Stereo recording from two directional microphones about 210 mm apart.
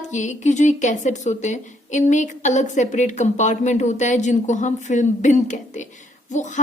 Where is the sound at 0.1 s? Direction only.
35° left (ahead or behind).